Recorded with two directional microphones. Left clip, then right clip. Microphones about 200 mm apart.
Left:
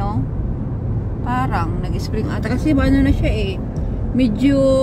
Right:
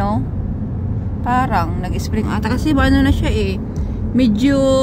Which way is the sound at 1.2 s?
35° right (ahead or behind).